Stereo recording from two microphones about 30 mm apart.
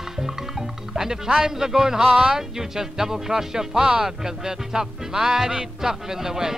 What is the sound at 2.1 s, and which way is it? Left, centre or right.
Speech, right.